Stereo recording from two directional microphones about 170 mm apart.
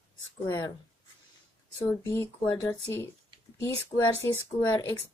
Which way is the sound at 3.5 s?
15° left (ahead or behind).